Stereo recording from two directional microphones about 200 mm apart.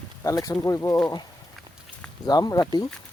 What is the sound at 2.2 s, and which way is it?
Speech, 20° left (ahead or behind).